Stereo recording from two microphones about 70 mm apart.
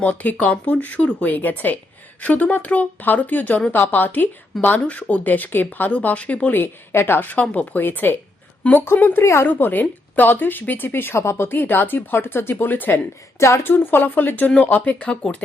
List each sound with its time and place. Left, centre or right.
0.0 s speech: left
9.2 s speech: left
9.5 s speech: left